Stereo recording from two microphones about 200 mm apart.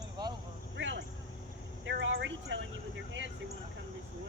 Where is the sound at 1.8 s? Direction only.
65° right (ahead or behind).